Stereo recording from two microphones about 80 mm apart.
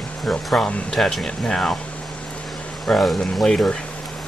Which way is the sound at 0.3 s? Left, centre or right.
Centre.